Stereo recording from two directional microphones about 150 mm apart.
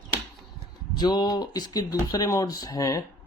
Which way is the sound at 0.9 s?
30° left (ahead or behind).